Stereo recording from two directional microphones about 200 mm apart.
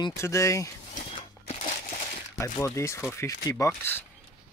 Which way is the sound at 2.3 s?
15° left (ahead or behind).